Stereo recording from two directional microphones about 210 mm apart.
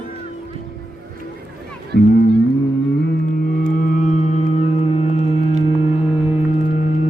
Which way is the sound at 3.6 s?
40° left (ahead or behind).